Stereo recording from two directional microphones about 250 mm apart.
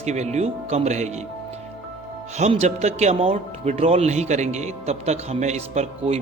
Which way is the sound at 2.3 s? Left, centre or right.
Right.